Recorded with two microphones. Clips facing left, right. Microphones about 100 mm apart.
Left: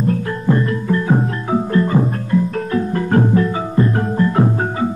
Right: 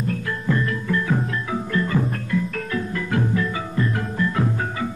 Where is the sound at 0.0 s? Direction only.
35° left (ahead or behind).